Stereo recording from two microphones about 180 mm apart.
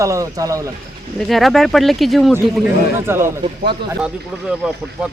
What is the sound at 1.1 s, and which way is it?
Speech, centre (ahead or behind).